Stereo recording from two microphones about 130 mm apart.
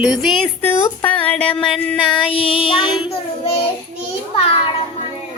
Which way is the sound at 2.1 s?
45° left (ahead or behind).